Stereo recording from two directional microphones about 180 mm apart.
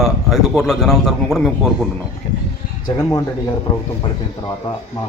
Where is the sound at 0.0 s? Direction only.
Centre (ahead or behind).